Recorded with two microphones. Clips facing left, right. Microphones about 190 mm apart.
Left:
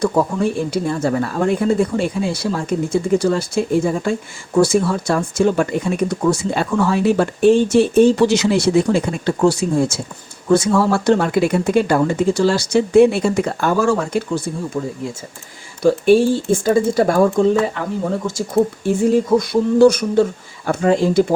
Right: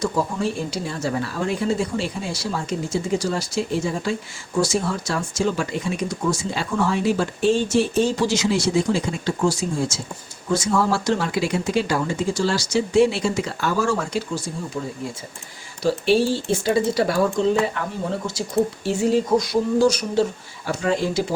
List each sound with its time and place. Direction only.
0.0 s speech: 60° left (ahead or behind)
15.8 s speech: 50° left (ahead or behind)